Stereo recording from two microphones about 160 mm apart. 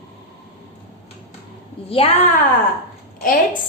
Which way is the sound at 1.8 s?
35° left (ahead or behind).